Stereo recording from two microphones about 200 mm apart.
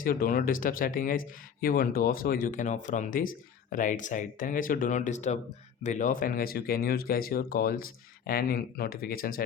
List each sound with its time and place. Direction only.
0.0 s speech: 45° left (ahead or behind)